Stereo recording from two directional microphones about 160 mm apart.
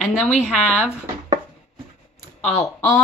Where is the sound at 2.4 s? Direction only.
15° left (ahead or behind).